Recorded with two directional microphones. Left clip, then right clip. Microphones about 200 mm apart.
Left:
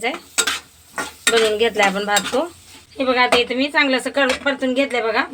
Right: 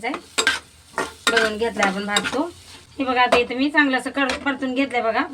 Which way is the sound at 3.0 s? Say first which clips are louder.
Left 2 dB; 50° left (ahead or behind).